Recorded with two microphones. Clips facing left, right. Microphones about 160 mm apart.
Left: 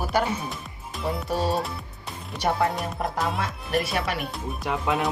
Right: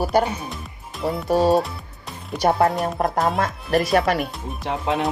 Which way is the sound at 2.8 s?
45° right (ahead or behind).